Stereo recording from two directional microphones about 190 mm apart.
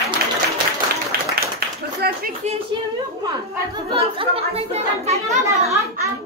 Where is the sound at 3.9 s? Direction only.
30° right (ahead or behind).